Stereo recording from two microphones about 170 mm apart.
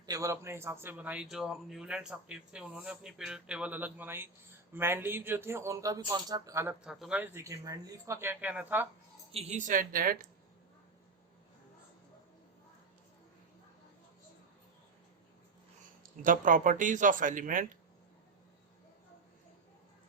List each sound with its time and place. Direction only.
0.0 s a man's voice: 20° right (ahead or behind)
6.8 s a man's voice: 5° right (ahead or behind)
9.3 s speech: 40° right (ahead or behind); by 10.2 s 55° right (ahead or behind)
16.2 s speech: 50° right (ahead or behind)